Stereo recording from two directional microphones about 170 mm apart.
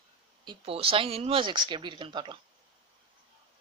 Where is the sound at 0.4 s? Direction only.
35° right (ahead or behind).